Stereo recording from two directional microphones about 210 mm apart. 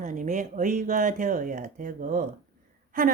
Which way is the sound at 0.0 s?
35° right (ahead or behind).